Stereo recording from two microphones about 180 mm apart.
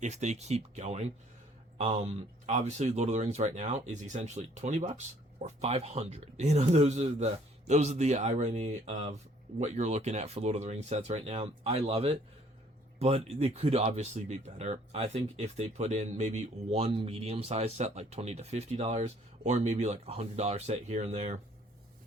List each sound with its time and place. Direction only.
0.0 s speech: 40° right (ahead or behind)